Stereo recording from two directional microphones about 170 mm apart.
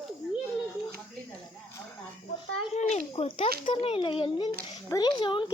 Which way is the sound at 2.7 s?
40° left (ahead or behind).